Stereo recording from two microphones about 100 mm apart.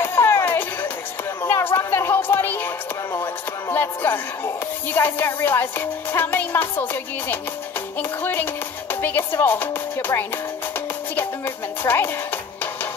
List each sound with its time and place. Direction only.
0.0 s a sound: 25° left (ahead or behind)
1.4 s music: 25° left (ahead or behind)
4.9 s speech: 20° left (ahead or behind)